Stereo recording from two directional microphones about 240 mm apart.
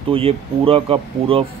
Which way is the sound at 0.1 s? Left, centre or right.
Right.